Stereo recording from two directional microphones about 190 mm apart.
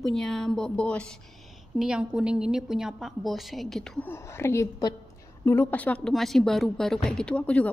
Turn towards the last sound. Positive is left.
turn(degrees=5)  # may be behind; listen again after turning